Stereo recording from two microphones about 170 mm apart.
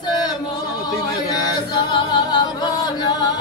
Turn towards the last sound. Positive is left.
turn(degrees=25)  # may be behind; listen again after turning